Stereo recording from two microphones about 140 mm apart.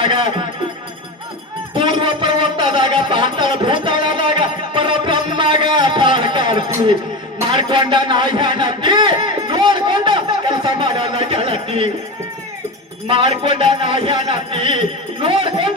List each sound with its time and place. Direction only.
0.0 s speech: 35° right (ahead or behind)
1.7 s a sound: 35° right (ahead or behind)
4.7 s music: 40° right (ahead or behind)
7.5 s a man's voice: 35° right (ahead or behind)
8.0 s a sound: 35° right (ahead or behind)
13.1 s music: 40° right (ahead or behind)